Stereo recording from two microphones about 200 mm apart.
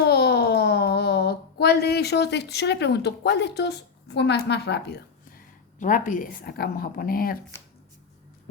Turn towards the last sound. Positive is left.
turn(degrees=45)  # may be behind; listen again after turning